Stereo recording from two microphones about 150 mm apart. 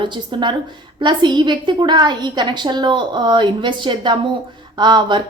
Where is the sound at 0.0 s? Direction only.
30° right (ahead or behind).